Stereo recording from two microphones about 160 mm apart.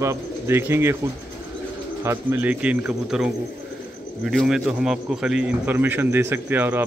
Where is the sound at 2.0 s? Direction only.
15° right (ahead or behind).